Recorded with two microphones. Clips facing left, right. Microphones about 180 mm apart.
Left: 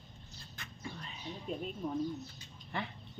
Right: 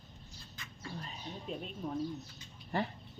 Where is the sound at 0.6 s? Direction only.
65° left (ahead or behind).